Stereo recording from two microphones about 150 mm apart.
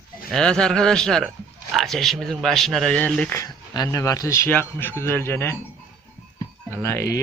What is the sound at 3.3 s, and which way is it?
Speech, 25° left (ahead or behind).